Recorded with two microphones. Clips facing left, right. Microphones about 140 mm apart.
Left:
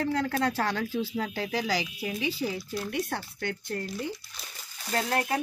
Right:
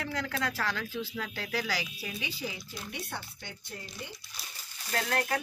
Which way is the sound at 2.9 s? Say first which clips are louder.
Left 6 dB; 55° left (ahead or behind).